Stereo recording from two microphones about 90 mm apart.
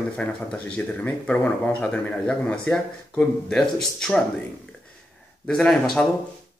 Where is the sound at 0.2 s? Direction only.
10° left (ahead or behind).